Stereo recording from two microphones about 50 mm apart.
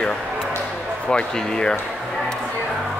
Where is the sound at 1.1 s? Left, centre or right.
Centre.